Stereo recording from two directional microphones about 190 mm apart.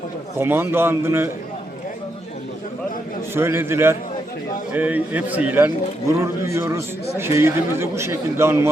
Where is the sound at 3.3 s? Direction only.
10° right (ahead or behind).